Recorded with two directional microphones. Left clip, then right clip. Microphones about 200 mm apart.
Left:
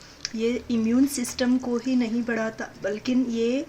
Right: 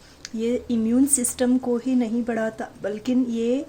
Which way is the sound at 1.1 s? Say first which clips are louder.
Right 2 dB; 30° right (ahead or behind).